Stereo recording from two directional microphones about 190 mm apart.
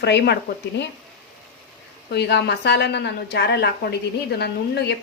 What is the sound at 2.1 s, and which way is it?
Speech, 60° left (ahead or behind).